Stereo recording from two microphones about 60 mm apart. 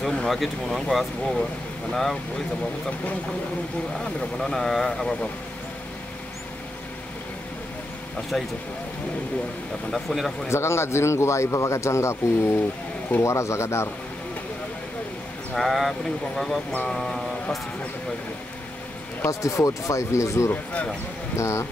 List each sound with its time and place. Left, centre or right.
0.0 s vehicle: centre
0.7 s speech: centre
4.4 s speech: centre
9.8 s speech: centre
10.5 s speech: left
15.5 s speech: centre
19.4 s speech: left